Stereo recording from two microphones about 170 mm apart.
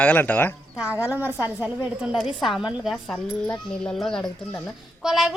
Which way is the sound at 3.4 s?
15° left (ahead or behind).